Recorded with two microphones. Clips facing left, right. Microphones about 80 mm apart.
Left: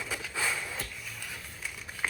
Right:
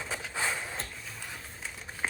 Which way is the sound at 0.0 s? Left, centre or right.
Right.